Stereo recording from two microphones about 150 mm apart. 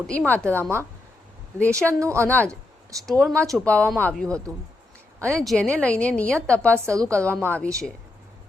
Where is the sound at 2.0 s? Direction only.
20° right (ahead or behind).